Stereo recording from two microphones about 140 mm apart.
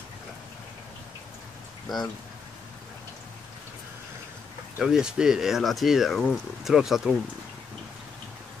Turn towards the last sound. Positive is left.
turn(degrees=0)  # may be behind; listen again after turning